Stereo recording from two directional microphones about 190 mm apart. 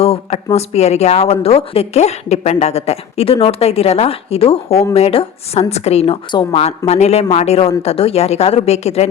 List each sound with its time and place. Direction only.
0.0 s speech: 30° left (ahead or behind)